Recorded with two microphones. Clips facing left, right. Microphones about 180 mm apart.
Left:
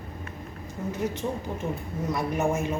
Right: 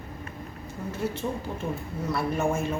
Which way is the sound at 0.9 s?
15° left (ahead or behind).